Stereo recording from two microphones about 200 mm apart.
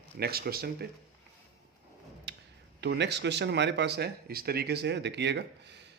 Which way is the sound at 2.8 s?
60° right (ahead or behind).